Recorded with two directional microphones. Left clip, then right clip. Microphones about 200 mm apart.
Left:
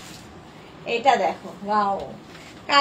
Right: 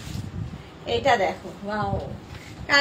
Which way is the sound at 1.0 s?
20° right (ahead or behind).